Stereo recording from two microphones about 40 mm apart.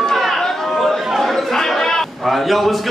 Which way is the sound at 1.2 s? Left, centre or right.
Centre.